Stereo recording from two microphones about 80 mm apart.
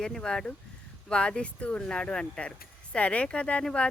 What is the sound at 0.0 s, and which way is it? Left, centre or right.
Speech, centre.